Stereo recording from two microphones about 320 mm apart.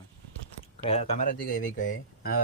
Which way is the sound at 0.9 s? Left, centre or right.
Centre.